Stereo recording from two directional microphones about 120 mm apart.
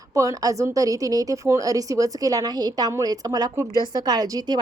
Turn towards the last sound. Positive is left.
turn(degrees=-35)  # may be behind; listen again after turning